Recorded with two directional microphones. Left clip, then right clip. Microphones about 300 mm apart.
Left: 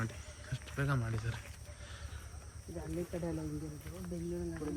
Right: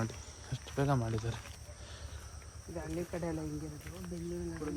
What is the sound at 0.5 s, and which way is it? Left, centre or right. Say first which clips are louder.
Speech: right 5 dB; centre.